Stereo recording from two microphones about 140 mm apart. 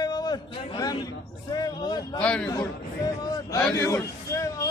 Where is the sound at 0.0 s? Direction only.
30° left (ahead or behind).